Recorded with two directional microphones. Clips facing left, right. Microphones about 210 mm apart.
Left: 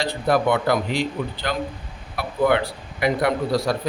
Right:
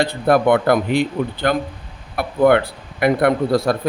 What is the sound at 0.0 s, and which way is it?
A man's voice, 55° right (ahead or behind).